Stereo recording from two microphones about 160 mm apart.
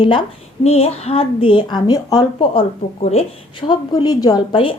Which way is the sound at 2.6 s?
40° left (ahead or behind).